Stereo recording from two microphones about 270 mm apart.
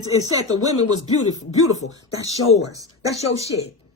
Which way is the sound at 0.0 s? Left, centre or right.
Centre.